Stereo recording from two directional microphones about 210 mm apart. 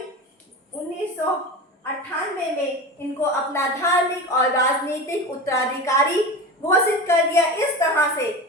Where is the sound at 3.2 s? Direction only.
15° left (ahead or behind).